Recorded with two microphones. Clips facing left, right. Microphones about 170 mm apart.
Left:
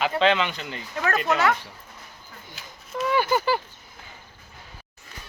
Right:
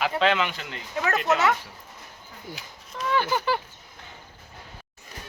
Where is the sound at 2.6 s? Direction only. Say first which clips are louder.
Even; 15° right (ahead or behind).